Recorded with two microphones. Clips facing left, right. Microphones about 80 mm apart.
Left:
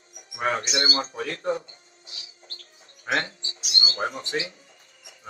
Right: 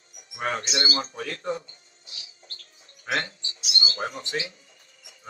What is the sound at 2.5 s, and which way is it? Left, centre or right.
Bird, left.